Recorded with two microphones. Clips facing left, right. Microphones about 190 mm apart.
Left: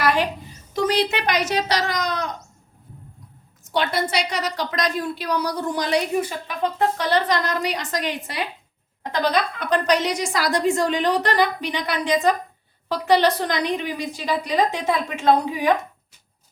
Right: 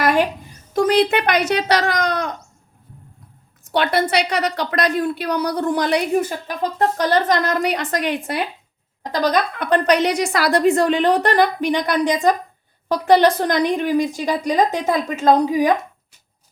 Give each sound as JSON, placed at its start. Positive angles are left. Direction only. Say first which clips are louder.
{"t": 0.0, "sound": "a sound", "louder": "right 3 dB", "side_deg": -50}
{"t": 0.7, "sound": "a woman's voice", "louder": "right 5 dB", "side_deg": -55}
{"t": 3.7, "sound": "a woman's voice", "louder": "right 4 dB", "side_deg": -60}
{"t": 6.5, "sound": "a woman's voice", "louder": "right 2 dB", "side_deg": -40}
{"t": 9.1, "sound": "a woman's voice", "louder": "right 3 dB", "side_deg": -40}
{"t": 9.6, "sound": "a woman's voice", "louder": "right 4 dB", "side_deg": -60}